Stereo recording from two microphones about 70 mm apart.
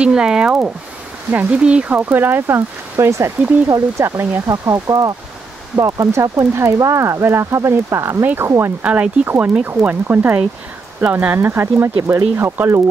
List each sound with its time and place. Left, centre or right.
0.0 s speech: centre
2.0 s speech: right
4.5 s speech: right
8.8 s speech: centre
11.3 s speech: right